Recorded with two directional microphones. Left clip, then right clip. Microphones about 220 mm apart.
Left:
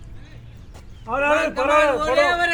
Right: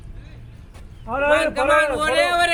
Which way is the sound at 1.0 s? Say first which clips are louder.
Right 1 dB; 50° left (ahead or behind).